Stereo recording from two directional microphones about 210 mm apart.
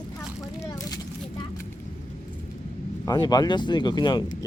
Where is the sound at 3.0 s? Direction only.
20° left (ahead or behind).